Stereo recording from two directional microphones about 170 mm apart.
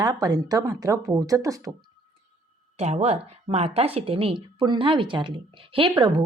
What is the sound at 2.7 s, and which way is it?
A woman's voice, 40° right (ahead or behind).